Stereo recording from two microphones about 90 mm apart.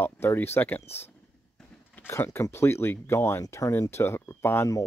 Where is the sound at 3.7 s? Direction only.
30° left (ahead or behind).